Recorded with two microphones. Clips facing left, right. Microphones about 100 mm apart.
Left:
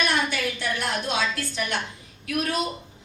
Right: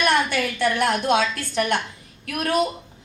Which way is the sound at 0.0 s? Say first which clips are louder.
Right 4 dB; 60° right (ahead or behind).